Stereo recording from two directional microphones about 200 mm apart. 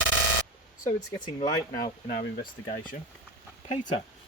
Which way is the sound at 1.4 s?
40° left (ahead or behind).